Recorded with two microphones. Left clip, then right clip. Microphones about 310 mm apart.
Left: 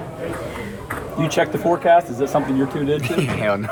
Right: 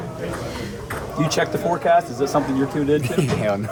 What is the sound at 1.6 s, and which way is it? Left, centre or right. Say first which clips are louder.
Speech: left 3 dB; left.